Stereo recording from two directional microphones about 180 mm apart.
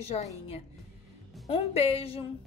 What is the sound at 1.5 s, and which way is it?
Speech, 35° left (ahead or behind).